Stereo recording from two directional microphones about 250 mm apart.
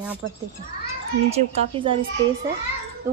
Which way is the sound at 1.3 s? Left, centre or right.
Right.